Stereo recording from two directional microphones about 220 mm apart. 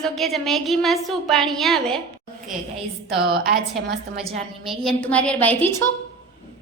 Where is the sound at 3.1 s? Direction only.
45° right (ahead or behind).